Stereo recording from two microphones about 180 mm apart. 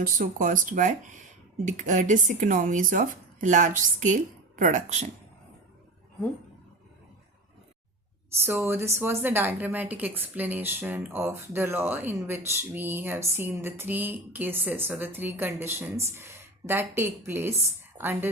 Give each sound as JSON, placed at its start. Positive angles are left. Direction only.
{"t": 0.0, "sound": "speech", "side_deg": -50}
{"t": 8.4, "sound": "a woman's voice", "side_deg": -10}